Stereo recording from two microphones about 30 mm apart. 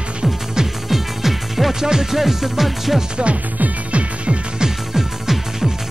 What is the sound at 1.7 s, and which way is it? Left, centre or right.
Music, centre.